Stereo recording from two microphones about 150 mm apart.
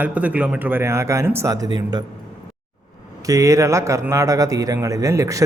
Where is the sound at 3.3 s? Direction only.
20° right (ahead or behind).